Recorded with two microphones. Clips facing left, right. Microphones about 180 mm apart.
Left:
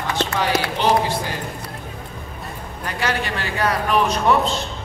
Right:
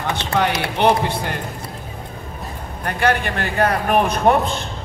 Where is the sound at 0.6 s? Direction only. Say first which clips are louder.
Right 2 dB; 60° right (ahead or behind).